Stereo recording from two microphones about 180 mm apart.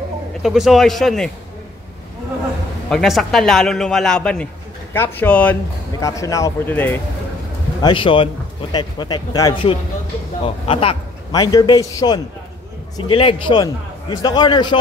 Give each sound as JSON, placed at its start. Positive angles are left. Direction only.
{"t": 0.4, "sound": "a man's voice", "side_deg": 0}
{"t": 2.9, "sound": "a man's voice", "side_deg": 0}
{"t": 7.8, "sound": "a man's voice", "side_deg": 30}